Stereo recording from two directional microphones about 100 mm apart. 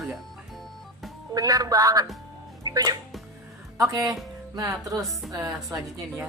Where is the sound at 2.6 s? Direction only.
40° right (ahead or behind).